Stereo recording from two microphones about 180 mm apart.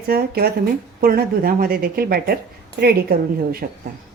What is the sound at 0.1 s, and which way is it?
Speech, 60° right (ahead or behind).